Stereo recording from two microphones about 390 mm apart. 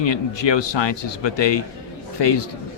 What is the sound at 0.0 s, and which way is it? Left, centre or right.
A man's voice, left.